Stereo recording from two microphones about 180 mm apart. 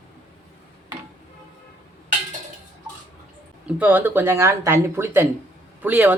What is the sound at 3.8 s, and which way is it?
Speech, 10° right (ahead or behind).